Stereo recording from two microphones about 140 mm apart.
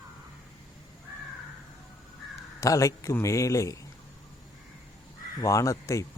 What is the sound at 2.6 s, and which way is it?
Speech, 20° left (ahead or behind).